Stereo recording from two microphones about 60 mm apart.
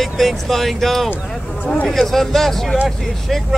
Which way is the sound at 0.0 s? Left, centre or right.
Centre.